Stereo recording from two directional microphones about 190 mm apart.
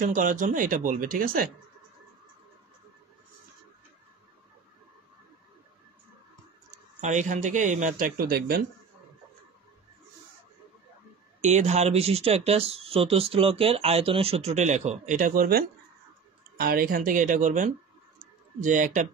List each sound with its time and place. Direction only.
0.0 s speech: 45° right (ahead or behind)
7.0 s speech: 40° right (ahead or behind)
11.4 s speech: 35° right (ahead or behind)